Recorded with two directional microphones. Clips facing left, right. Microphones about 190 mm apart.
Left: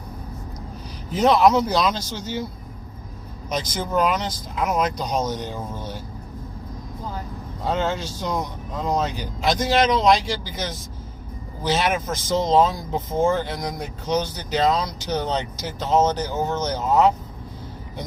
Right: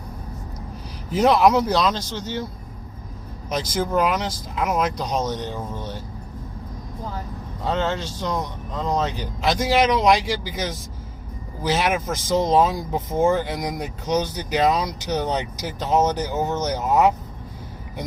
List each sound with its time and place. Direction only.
1.1 s speech: 5° right (ahead or behind)
3.5 s speech: 5° right (ahead or behind)
7.7 s speech: 5° left (ahead or behind); by 17.2 s 15° right (ahead or behind)